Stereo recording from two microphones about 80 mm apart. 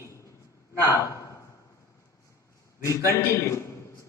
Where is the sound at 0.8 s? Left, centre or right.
Left.